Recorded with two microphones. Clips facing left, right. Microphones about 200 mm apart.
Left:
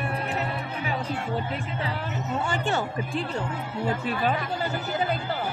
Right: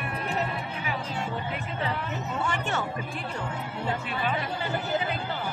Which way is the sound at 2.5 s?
30° left (ahead or behind).